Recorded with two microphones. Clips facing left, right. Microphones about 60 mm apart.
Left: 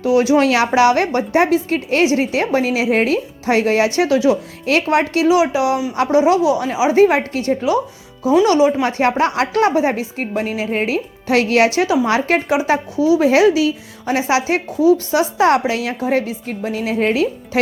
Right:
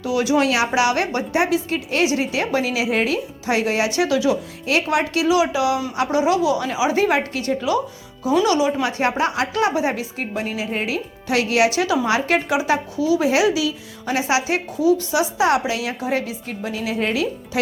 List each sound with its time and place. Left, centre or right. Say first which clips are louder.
0.0 s a woman's voice: left 5 dB; left